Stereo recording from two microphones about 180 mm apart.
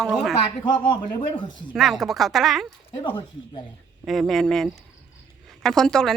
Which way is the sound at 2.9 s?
25° left (ahead or behind).